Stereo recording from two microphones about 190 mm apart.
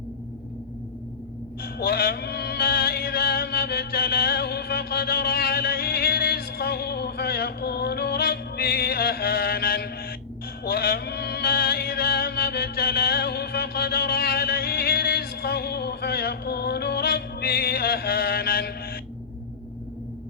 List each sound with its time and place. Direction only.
1.6 s music: 55° left (ahead or behind)